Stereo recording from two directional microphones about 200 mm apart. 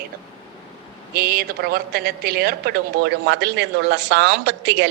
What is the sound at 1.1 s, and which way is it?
A woman's voice, 50° right (ahead or behind).